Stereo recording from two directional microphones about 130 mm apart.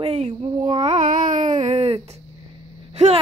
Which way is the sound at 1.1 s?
90° right.